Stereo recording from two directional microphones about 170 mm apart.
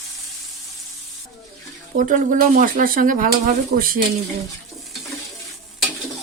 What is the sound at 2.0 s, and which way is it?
Speech, 50° right (ahead or behind).